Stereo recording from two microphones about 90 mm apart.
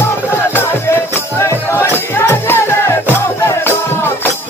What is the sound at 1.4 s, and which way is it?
Music, 30° left (ahead or behind).